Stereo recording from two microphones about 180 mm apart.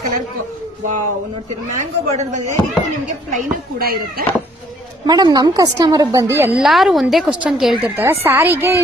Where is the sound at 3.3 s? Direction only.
55° right (ahead or behind).